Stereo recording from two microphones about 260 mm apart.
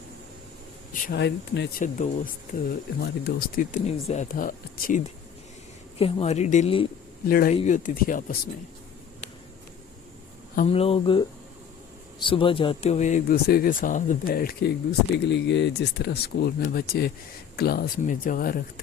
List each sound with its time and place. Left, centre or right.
1.0 s speech: left
7.3 s speech: left
10.5 s speech: left